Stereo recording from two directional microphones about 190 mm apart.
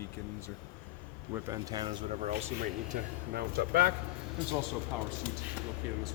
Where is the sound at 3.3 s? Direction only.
50° right (ahead or behind).